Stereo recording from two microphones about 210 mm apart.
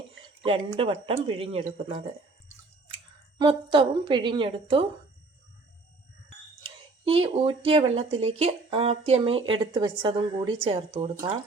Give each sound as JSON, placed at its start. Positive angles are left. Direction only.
{"t": 0.4, "sound": "speech", "side_deg": -25}
{"t": 3.3, "sound": "speech", "side_deg": -25}
{"t": 6.6, "sound": "speech", "side_deg": -25}